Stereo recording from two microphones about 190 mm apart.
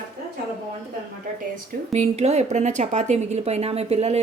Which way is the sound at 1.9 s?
35° right (ahead or behind).